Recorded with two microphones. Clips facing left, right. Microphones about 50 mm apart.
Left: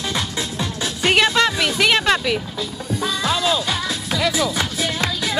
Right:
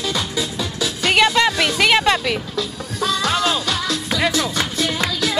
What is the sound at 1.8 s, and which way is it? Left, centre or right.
Speech, centre.